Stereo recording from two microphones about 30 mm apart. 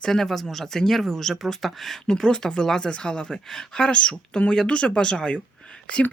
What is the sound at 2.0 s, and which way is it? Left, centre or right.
Speech, left.